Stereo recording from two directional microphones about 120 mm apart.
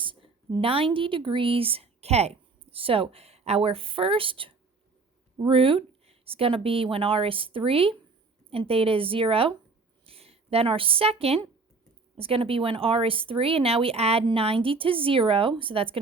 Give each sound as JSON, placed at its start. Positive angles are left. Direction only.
{"t": 0.0, "sound": "a woman's voice", "side_deg": -45}